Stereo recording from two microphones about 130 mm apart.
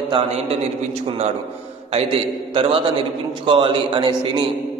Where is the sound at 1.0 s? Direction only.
55° right (ahead or behind).